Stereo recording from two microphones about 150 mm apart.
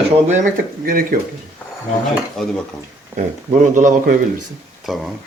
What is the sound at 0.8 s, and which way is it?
Speech, 75° right (ahead or behind).